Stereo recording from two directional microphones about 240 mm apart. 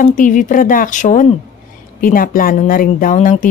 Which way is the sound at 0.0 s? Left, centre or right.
Left.